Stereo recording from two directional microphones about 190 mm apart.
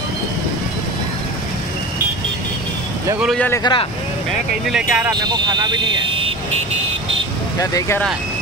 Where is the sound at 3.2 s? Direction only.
Centre (ahead or behind).